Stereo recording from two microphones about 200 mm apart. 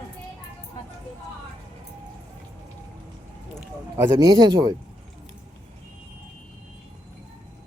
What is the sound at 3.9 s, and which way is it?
Speech, 20° right (ahead or behind).